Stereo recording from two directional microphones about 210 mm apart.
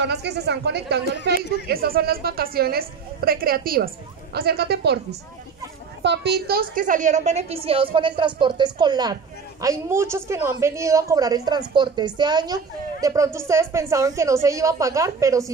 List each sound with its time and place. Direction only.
0.0 s a woman's voice: 55° right (ahead or behind)
6.0 s a woman's voice: 50° right (ahead or behind); by 15.5 s 15° right (ahead or behind)